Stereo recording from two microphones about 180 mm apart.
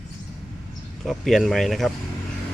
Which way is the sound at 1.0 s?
Centre (ahead or behind).